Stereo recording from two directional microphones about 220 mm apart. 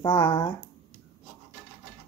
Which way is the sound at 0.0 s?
20° left (ahead or behind).